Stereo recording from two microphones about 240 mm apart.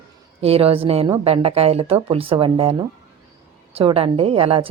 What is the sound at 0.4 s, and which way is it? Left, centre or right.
Speech, right.